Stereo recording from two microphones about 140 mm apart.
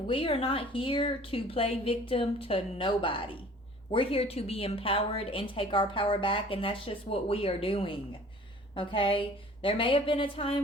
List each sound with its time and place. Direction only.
0.1 s a woman's voice: 40° left (ahead or behind)